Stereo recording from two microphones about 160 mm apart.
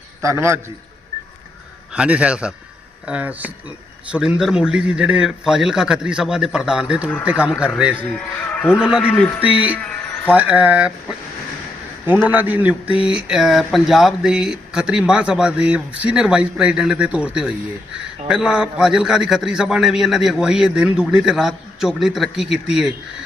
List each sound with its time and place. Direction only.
0.2 s speech: 15° right (ahead or behind)
2.0 s speech: 5° right (ahead or behind)
7.9 s speech: 10° left (ahead or behind)
8.8 s speech: 5° right (ahead or behind)
9.0 s speech: 10° left (ahead or behind)
9.4 s speech: 10° right (ahead or behind)
12.0 s speech: 10° right (ahead or behind)